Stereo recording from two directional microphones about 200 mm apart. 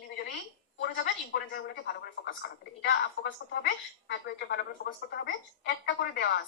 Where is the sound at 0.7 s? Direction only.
60° left (ahead or behind).